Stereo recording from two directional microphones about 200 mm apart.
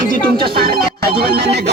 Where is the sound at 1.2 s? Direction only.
55° right (ahead or behind).